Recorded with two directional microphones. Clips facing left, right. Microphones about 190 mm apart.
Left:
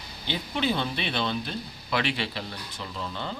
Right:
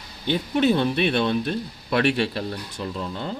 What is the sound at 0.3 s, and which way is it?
Speech, 50° right (ahead or behind).